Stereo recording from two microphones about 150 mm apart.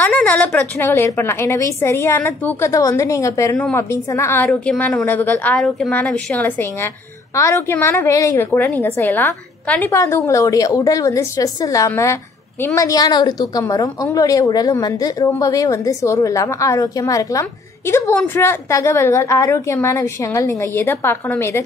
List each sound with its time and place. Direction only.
0.0 s a woman's voice: 10° left (ahead or behind)